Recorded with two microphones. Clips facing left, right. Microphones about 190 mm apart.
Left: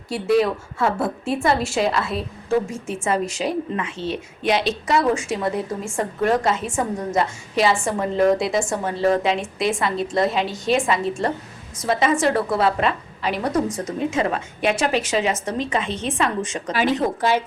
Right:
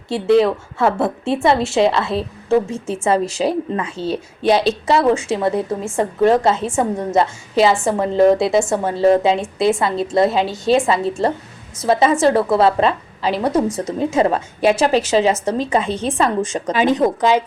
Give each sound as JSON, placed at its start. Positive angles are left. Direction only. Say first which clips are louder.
{"t": 0.1, "sound": "a woman's voice", "louder": "right 5 dB", "side_deg": -25}